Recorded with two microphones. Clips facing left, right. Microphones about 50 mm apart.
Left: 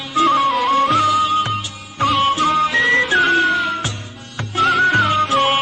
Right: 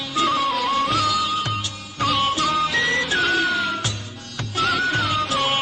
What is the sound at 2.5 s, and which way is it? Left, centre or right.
Music, centre.